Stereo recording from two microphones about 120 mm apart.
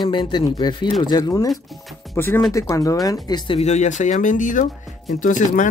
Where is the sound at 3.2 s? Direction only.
40° left (ahead or behind).